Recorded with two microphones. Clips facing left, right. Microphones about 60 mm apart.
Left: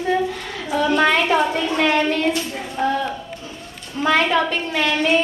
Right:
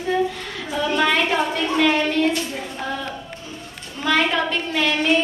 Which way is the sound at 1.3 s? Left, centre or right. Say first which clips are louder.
Left 3 dB; centre.